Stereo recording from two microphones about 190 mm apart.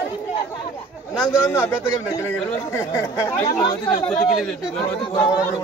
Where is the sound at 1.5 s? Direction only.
15° left (ahead or behind).